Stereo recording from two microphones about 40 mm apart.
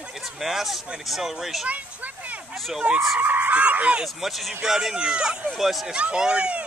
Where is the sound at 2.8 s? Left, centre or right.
Right.